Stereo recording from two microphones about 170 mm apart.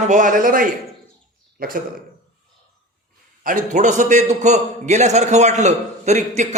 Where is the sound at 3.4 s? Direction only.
50° right (ahead or behind).